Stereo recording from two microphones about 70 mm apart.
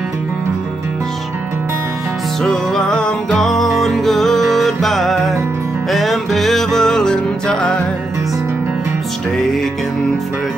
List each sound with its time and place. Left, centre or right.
2.4 s music: centre